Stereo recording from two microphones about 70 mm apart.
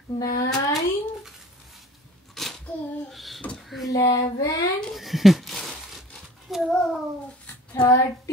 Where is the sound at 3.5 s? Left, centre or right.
Centre.